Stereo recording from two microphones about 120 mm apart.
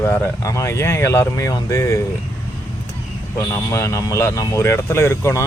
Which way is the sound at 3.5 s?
25° left (ahead or behind).